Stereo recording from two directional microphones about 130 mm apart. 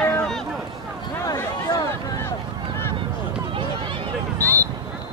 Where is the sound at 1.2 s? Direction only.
25° left (ahead or behind).